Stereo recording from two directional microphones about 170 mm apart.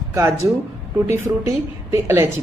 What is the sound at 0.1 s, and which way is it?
A woman's voice, 15° right (ahead or behind).